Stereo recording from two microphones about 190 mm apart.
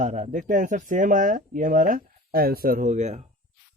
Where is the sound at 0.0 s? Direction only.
40° right (ahead or behind).